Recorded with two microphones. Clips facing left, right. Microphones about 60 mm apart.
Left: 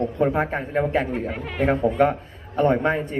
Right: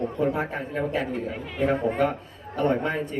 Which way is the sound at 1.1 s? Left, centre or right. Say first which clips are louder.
Left 3 dB; left.